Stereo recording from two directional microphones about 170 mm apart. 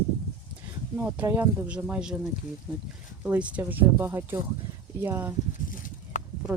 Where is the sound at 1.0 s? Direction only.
10° right (ahead or behind).